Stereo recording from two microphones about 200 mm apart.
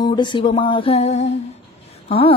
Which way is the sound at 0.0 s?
20° left (ahead or behind).